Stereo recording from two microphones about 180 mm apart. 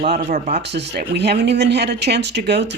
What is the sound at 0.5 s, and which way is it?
Speech, 70° right (ahead or behind).